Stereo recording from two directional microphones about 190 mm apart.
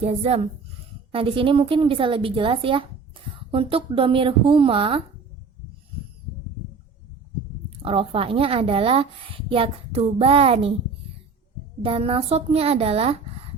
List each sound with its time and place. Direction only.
0.0 s a woman's voice: 30° right (ahead or behind)
7.8 s a woman's voice: 30° right (ahead or behind)
11.8 s speech: 30° right (ahead or behind)